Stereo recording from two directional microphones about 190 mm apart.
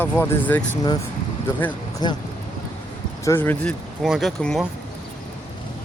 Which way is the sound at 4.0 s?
Centre (ahead or behind).